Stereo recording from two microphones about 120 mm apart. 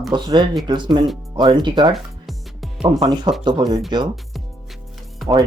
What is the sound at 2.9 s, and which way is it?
Speech, 35° right (ahead or behind).